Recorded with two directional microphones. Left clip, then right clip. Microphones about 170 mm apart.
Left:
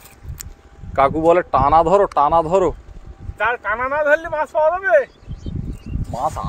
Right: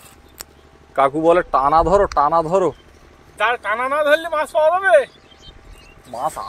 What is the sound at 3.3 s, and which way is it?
Speech, centre (ahead or behind).